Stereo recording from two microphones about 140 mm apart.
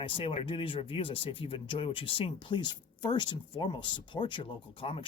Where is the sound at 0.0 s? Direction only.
40° left (ahead or behind).